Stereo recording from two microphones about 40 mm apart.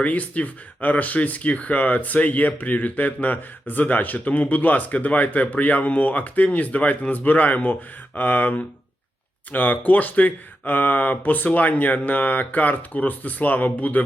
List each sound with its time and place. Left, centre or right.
0.0 s speech: left